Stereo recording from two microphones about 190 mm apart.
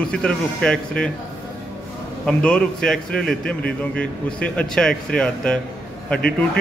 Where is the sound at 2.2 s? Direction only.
5° left (ahead or behind).